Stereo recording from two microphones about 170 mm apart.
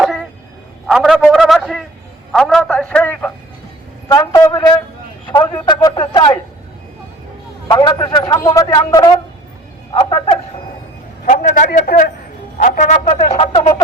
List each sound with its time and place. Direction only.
0.0 s a sound: centre (ahead or behind)
2.3 s a man's voice: centre (ahead or behind); by 6.3 s 25° left (ahead or behind)
7.7 s a man's voice: 25° left (ahead or behind)
11.3 s music: 45° left (ahead or behind)